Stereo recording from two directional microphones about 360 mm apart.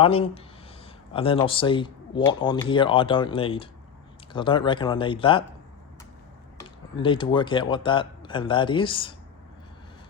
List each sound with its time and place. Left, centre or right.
0.0 s speech: centre
6.6 s a man's voice: centre